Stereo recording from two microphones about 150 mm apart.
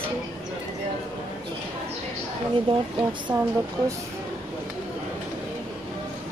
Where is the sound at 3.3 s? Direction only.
35° right (ahead or behind).